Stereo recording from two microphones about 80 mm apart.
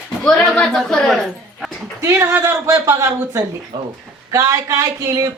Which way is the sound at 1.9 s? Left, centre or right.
Right.